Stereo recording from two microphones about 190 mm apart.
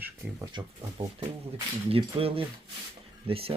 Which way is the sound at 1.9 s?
30° right (ahead or behind).